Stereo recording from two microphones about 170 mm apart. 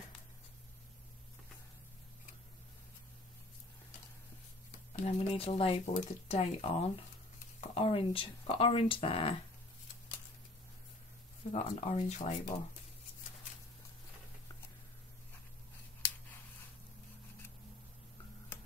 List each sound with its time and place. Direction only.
4.9 s speech: 35° left (ahead or behind)
11.5 s speech: 40° left (ahead or behind)